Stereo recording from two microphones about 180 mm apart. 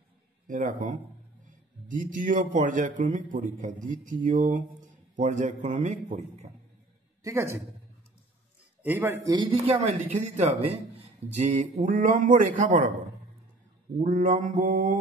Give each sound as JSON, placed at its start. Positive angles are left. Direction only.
{"t": 0.5, "sound": "a man's voice", "side_deg": -45}
{"t": 7.2, "sound": "speech", "side_deg": -15}
{"t": 8.8, "sound": "speech", "side_deg": -10}
{"t": 9.8, "sound": "a man's voice", "side_deg": -40}
{"t": 14.0, "sound": "a man's voice", "side_deg": -45}